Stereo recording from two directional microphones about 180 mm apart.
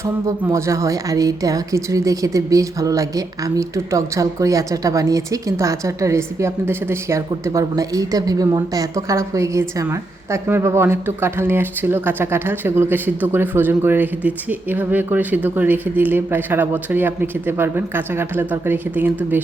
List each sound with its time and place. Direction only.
0.0 s speech: 15° right (ahead or behind)